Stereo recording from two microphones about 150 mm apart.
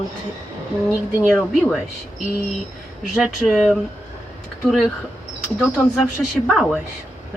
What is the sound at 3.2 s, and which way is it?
A woman's voice, 5° right (ahead or behind).